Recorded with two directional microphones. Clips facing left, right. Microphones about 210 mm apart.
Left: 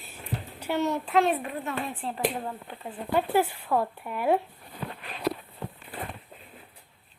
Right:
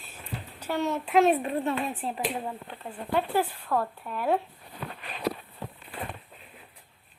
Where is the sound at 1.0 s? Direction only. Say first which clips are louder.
Right 7 dB; 20° right (ahead or behind).